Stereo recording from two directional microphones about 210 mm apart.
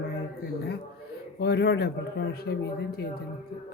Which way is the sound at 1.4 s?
55° left (ahead or behind).